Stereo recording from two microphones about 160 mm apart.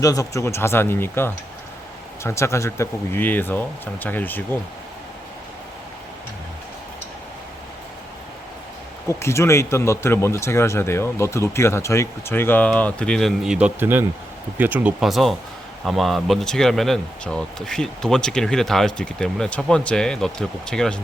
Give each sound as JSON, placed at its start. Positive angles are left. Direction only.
{"t": 0.0, "sound": "speech", "side_deg": 20}
{"t": 9.0, "sound": "speech", "side_deg": 15}